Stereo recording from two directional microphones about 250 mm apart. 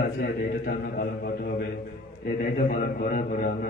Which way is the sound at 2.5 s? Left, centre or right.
Left.